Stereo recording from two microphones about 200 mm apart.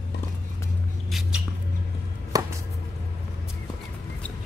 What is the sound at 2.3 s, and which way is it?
Chopping, 20° right (ahead or behind).